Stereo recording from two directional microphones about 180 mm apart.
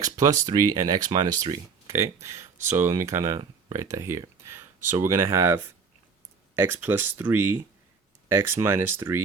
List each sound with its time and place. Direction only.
0.0 s speech: 20° right (ahead or behind)
6.6 s speech: 10° right (ahead or behind)